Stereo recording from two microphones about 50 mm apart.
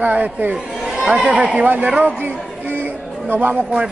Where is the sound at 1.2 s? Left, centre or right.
Right.